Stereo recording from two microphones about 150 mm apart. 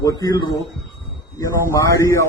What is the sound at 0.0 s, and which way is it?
Speech, 25° left (ahead or behind).